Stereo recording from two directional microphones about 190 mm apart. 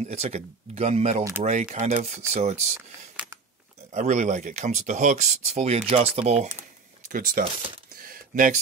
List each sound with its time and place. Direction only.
0.0 s speech: 35° right (ahead or behind)
2.7 s speech: 10° right (ahead or behind)
3.9 s speech: 40° right (ahead or behind)
7.1 s speech: 45° right (ahead or behind)
8.0 s a sound: 45° right (ahead or behind)